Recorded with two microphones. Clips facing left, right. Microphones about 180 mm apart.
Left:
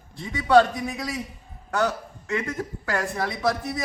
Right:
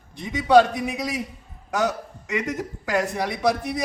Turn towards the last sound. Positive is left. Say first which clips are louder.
# right 3 dB
turn(degrees=-15)  # may be behind; listen again after turning